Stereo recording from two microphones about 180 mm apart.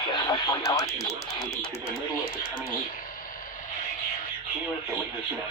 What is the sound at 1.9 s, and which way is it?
Speech, 55° left (ahead or behind).